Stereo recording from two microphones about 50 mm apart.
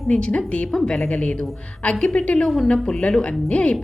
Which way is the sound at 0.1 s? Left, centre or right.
Left.